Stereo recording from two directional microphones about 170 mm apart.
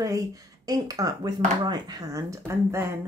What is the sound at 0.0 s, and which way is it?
Speech, 20° right (ahead or behind).